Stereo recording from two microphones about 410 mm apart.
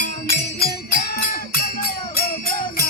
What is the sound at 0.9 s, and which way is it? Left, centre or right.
Music, left.